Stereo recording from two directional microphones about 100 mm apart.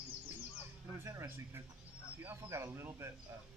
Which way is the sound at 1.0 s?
25° right (ahead or behind).